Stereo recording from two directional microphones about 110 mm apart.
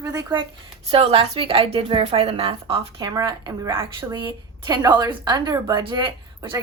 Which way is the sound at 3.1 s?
35° right (ahead or behind).